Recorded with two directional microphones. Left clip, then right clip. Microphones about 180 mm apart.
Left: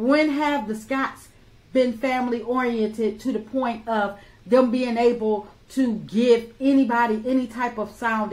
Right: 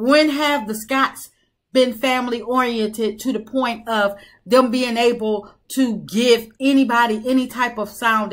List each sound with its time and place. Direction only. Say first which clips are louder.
0.0 s speech: right 5 dB; 20° right (ahead or behind)